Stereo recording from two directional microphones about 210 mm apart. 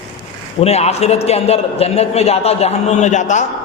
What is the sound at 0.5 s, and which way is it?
A man's voice, 30° left (ahead or behind).